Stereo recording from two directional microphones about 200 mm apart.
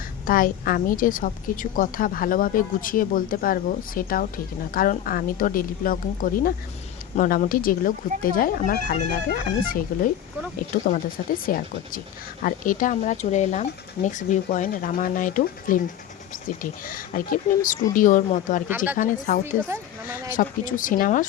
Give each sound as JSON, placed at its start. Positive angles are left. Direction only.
{"t": 0.3, "sound": "a woman's voice", "side_deg": 45}